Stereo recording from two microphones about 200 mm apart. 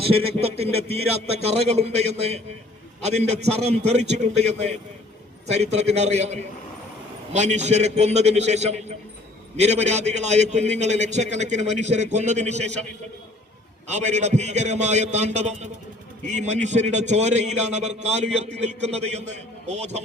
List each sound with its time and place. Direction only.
0.0 s a man's voice: 30° right (ahead or behind)
13.8 s a man's voice: 35° right (ahead or behind)